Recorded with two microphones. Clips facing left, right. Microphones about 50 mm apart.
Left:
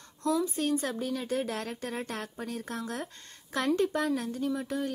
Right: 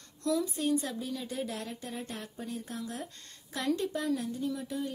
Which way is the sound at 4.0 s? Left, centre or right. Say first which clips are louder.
Left 2 dB; left.